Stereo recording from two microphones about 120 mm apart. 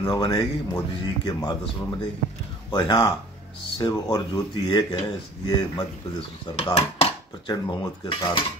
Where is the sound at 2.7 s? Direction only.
40° left (ahead or behind).